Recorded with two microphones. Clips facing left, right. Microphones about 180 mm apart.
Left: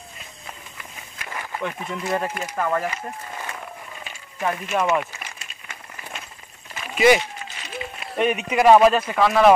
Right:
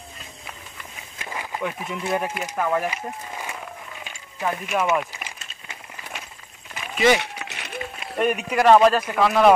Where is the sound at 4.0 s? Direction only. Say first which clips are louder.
Left 1 dB; centre (ahead or behind).